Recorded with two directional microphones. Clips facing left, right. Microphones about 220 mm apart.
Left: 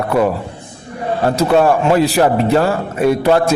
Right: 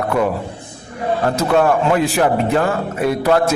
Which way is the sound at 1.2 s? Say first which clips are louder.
Left 3 dB; 30° left (ahead or behind).